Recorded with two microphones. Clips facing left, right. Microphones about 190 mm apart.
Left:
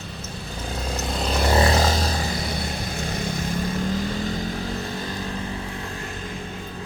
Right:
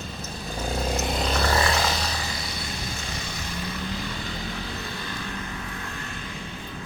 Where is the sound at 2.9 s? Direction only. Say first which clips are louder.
Left 8 dB; 55° left (ahead or behind); by 5.2 s 35° left (ahead or behind).